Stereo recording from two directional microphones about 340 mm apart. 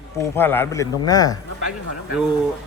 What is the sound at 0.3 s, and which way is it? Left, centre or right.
A man's voice, centre.